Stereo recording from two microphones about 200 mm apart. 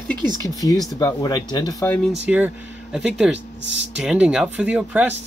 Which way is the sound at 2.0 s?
5° right (ahead or behind).